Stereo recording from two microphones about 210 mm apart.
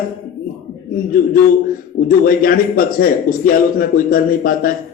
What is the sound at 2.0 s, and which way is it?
A man's voice, 45° left (ahead or behind).